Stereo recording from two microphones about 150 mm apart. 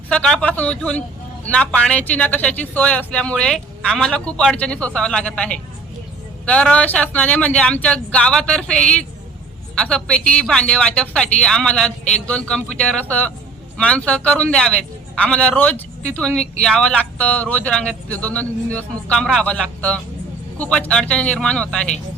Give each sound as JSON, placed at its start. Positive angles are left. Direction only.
{"t": 0.1, "sound": "a man's voice", "side_deg": 5}